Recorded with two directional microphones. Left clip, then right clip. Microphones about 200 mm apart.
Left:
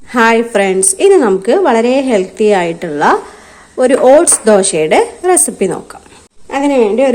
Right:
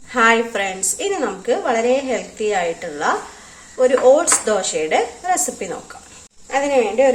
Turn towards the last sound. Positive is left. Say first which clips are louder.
# left 5 dB
turn(degrees=55)  # may be behind; listen again after turning